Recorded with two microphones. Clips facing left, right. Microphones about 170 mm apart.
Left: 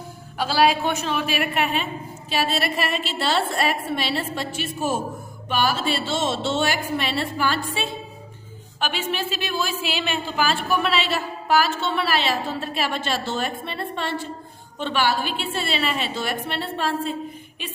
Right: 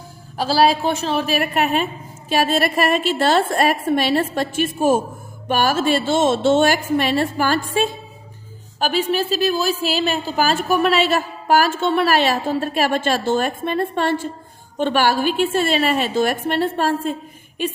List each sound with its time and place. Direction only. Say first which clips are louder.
0.3 s a woman's voice: right 3 dB; 35° right (ahead or behind)